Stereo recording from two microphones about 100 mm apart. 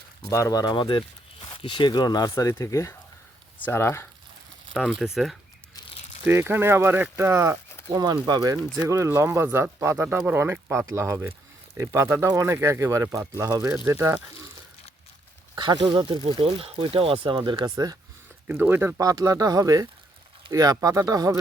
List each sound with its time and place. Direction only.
0.3 s speech: 35° left (ahead or behind)
2.5 s speech: 25° left (ahead or behind)
4.7 s speech: 5° right (ahead or behind)
6.2 s speech: 20° right (ahead or behind)
7.9 s speech: 40° right (ahead or behind)
8.8 s speech: 30° right (ahead or behind)
15.5 s speech: 45° right (ahead or behind)
18.4 s speech: 20° right (ahead or behind)
18.9 s speech: 35° right (ahead or behind)